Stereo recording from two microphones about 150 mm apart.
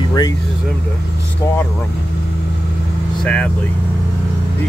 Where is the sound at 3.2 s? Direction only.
10° left (ahead or behind).